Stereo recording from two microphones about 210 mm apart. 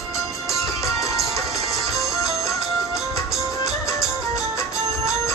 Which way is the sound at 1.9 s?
15° left (ahead or behind).